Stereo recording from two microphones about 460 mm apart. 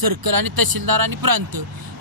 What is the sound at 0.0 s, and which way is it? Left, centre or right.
Speech, right.